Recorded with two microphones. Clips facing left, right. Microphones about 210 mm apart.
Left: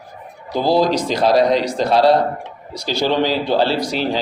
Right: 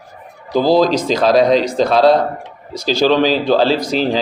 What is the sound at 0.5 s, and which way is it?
A man's voice, 90° right.